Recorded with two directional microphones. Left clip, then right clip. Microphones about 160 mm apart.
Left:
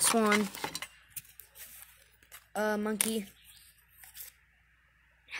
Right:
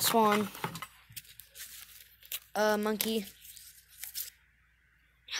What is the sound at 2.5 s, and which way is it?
Speech, 10° left (ahead or behind).